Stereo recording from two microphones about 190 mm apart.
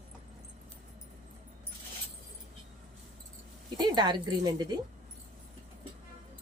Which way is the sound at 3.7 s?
20° right (ahead or behind).